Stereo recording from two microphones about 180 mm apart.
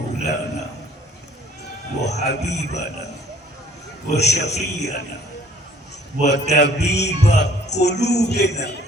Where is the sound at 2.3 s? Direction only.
70° left (ahead or behind).